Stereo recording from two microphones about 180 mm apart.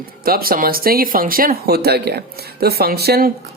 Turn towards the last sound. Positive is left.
turn(degrees=-60)  # may be behind; listen again after turning